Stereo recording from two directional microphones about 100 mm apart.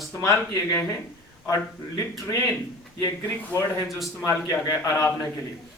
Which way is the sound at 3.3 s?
20° left (ahead or behind).